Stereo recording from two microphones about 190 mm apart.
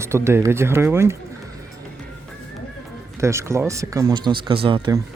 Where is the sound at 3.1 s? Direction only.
15° right (ahead or behind).